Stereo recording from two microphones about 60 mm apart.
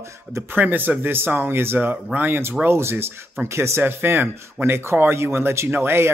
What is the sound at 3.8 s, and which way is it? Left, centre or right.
Speech, right.